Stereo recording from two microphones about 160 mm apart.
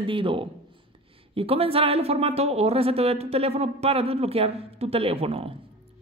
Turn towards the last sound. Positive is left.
turn(degrees=-35)  # may be behind; listen again after turning